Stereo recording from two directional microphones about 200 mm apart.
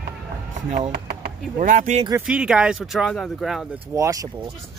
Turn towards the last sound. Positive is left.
turn(degrees=-20)  # may be behind; listen again after turning